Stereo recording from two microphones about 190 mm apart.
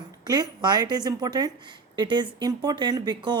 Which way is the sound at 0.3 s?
20° right (ahead or behind).